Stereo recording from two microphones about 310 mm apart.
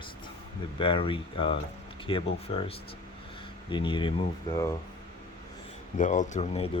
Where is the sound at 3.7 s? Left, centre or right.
Centre.